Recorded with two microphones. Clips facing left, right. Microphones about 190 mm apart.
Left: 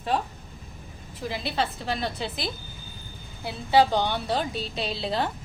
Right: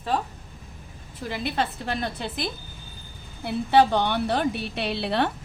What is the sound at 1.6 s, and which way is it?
Speech, 50° right (ahead or behind).